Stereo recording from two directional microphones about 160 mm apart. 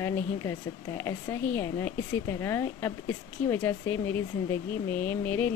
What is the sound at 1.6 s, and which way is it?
Speech, 20° left (ahead or behind).